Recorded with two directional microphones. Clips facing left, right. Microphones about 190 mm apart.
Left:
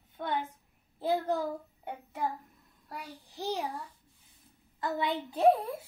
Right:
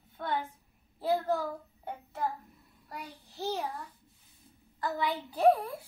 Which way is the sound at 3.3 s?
15° left (ahead or behind).